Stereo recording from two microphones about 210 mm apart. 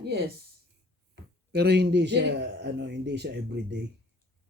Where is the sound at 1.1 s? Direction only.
50° right (ahead or behind).